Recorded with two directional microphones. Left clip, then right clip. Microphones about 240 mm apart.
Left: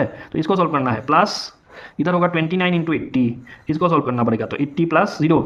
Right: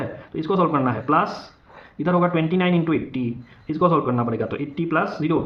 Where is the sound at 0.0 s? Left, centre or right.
Left.